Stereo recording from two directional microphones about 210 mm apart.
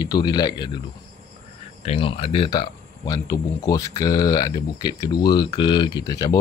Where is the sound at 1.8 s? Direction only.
25° left (ahead or behind).